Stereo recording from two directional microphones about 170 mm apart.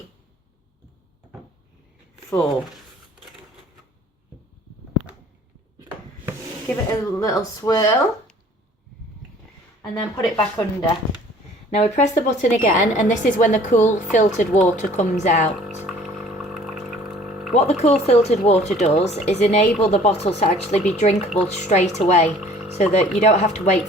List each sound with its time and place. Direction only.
7.0 s speech: 20° left (ahead or behind)
9.9 s speech: centre (ahead or behind)
10.3 s speech: 25° left (ahead or behind)
11.7 s a woman's voice: 40° left (ahead or behind)
15.9 s pump: centre (ahead or behind)
17.5 s speech: 40° left (ahead or behind)